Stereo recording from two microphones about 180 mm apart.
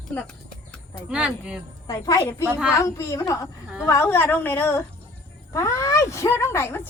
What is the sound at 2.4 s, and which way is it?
Speech, 10° right (ahead or behind).